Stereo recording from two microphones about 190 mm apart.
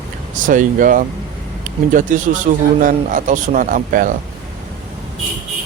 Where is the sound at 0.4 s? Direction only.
45° right (ahead or behind).